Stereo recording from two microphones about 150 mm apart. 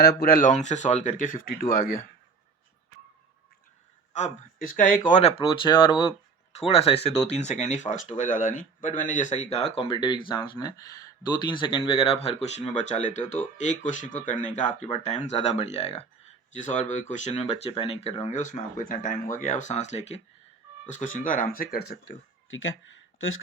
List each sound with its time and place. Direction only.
0.0 s speech: 85° left; by 1.5 s 65° left (ahead or behind)
1.7 s speech: 75° left (ahead or behind)
4.1 s speech: 60° left (ahead or behind)
5.4 s speech: 35° left (ahead or behind)
20.8 s speech: 60° left (ahead or behind); by 22.2 s 90° left